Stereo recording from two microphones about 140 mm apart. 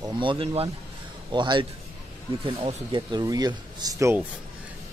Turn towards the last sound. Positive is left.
turn(degrees=-25)  # may be behind; listen again after turning